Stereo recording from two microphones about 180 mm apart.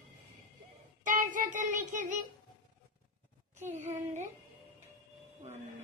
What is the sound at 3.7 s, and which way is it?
Speech, 40° right (ahead or behind).